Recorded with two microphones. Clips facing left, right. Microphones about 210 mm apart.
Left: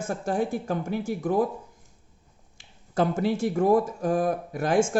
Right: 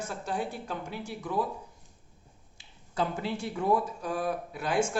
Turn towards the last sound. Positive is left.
turn(degrees=45)  # may be behind; listen again after turning